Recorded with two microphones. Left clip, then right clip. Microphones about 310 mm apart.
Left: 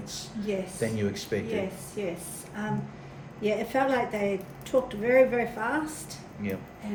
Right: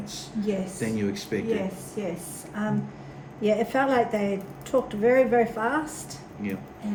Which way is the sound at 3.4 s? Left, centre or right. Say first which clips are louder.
Right 3 dB; centre.